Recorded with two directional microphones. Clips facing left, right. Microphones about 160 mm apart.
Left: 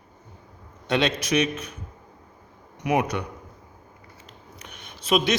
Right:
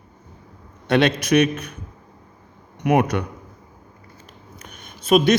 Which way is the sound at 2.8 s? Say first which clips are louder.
Right 5 dB; 60° right (ahead or behind).